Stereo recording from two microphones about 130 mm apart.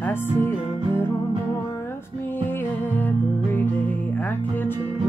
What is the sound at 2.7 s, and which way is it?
Music, 15° left (ahead or behind).